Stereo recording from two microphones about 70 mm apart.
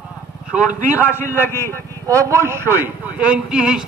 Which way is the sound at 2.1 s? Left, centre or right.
Right.